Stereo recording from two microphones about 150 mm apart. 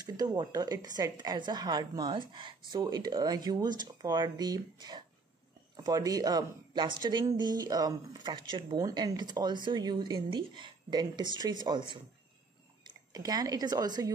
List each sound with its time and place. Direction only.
0.0 s speech: 25° right (ahead or behind)